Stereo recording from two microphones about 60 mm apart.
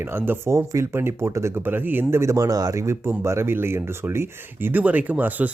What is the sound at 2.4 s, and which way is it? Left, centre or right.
Speech, right.